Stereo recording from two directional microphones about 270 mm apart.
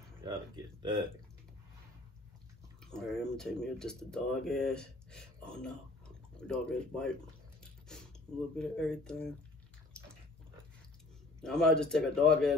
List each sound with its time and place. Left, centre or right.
0.2 s speech: centre
2.8 s speech: centre
8.5 s a man's voice: centre
11.4 s a man's voice: centre